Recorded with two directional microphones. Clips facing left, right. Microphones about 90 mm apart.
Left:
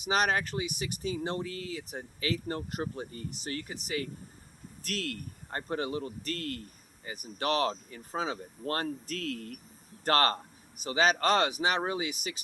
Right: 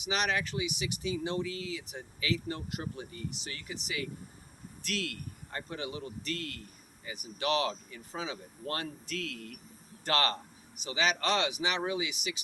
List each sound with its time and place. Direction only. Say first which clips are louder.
0.0 s a man's voice: left 4 dB; 40° left (ahead or behind)